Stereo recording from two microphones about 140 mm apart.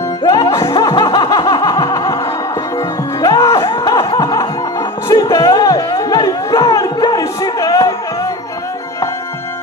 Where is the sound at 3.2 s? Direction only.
25° left (ahead or behind).